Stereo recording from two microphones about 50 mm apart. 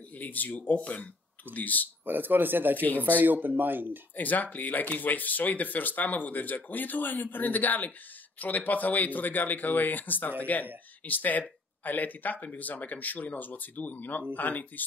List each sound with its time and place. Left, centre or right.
0.2 s speech: left
2.0 s speech: right
4.2 s speech: left